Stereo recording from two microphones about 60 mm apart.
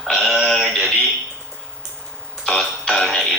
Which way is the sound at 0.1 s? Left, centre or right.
Centre.